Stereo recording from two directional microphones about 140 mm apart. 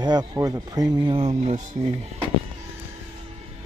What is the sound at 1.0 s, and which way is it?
Speech, 40° right (ahead or behind).